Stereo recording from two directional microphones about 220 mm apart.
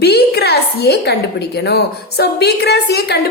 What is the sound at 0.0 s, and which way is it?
A woman's voice, 50° left (ahead or behind).